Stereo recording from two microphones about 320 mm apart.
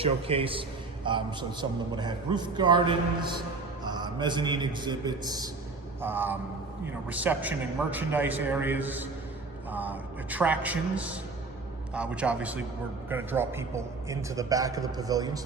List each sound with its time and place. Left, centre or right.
0.0 s a man's voice: centre